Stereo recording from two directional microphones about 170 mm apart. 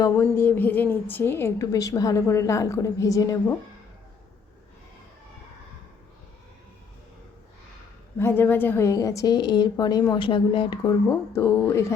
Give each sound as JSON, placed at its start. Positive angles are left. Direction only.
{"t": 0.1, "sound": "a woman's voice", "side_deg": 15}
{"t": 8.2, "sound": "a woman's voice", "side_deg": 15}
{"t": 11.3, "sound": "a woman's voice", "side_deg": 15}